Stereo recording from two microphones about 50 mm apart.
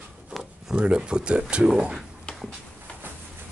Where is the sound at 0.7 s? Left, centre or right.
Centre.